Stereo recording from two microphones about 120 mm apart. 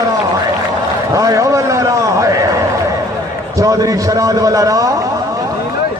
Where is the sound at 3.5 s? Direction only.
30° right (ahead or behind).